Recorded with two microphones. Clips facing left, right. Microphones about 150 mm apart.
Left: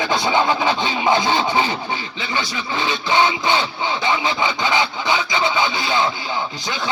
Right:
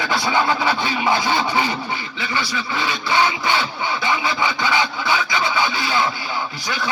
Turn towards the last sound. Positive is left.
turn(degrees=20)  # may be behind; listen again after turning